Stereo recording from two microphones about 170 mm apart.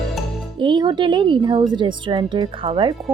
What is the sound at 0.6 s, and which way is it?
Speech, 30° right (ahead or behind).